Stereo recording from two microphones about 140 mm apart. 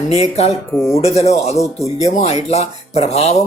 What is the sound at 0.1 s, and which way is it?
Speech, 50° left (ahead or behind).